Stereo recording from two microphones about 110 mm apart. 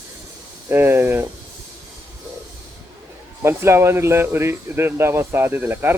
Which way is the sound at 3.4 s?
25° right (ahead or behind).